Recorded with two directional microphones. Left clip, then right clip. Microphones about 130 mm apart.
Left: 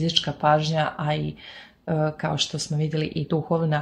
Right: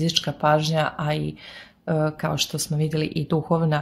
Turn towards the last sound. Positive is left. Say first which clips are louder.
# right 1 dB
turn(degrees=-40)  # may be behind; listen again after turning